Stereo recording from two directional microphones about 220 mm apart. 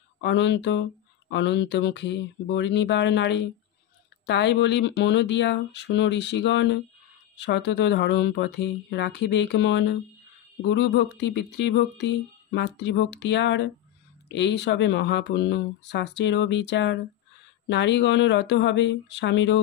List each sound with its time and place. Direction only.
0.2 s speech: 50° left (ahead or behind)